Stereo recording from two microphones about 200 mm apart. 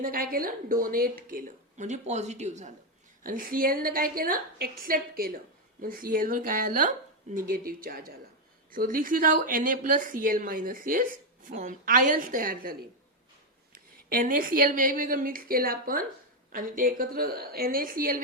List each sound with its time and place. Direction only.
0.0 s a woman's voice: 45° right (ahead or behind)
13.7 s a woman's voice: 45° right (ahead or behind)